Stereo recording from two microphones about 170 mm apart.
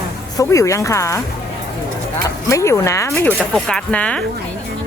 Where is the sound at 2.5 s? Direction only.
15° left (ahead or behind).